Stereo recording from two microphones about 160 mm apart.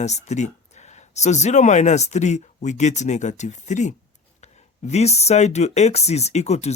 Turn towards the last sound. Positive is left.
turn(degrees=45)  # may be behind; listen again after turning